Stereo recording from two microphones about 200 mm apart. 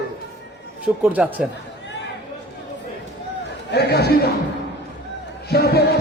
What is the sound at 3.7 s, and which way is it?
Speech, 55° left (ahead or behind).